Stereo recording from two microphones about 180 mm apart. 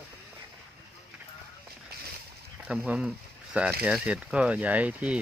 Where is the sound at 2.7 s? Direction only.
5° right (ahead or behind).